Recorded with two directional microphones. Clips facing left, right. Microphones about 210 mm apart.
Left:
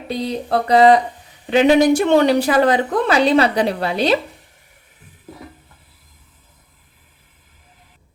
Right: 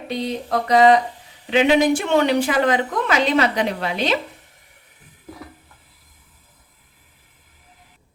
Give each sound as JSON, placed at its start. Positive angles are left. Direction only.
{"t": 0.1, "sound": "speech", "side_deg": 35}